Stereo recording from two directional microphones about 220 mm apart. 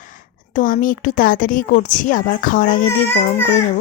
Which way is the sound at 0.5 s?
35° left (ahead or behind).